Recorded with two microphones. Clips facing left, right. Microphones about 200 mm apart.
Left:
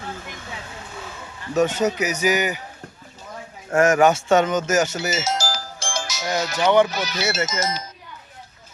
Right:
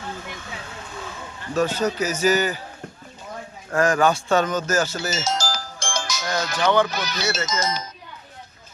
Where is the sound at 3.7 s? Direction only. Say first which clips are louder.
Left 3 dB; 25° left (ahead or behind).